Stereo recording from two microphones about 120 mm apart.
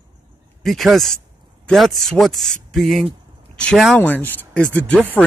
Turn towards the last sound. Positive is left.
turn(degrees=10)  # may be behind; listen again after turning